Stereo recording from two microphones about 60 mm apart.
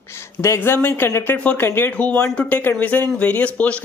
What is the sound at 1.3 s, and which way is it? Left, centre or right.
Speech, left.